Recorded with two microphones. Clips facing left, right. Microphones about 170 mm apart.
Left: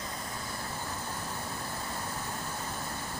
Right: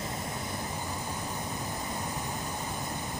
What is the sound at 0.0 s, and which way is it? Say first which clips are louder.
Vehicle: right 4 dB; 25° right (ahead or behind).